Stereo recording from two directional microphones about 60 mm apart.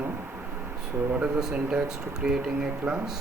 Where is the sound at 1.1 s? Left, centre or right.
Centre.